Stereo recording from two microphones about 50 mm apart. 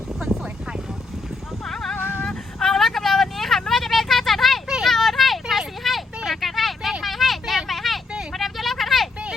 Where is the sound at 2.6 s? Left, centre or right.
Centre.